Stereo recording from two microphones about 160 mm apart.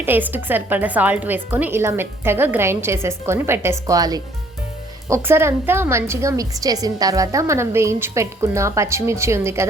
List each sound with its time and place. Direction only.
0.0 s speech: 10° right (ahead or behind)